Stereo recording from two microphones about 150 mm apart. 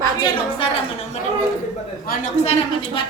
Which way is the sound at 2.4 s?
45° left (ahead or behind).